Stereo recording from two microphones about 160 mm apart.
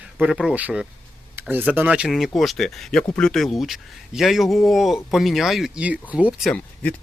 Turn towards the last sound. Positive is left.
turn(degrees=10)  # may be behind; listen again after turning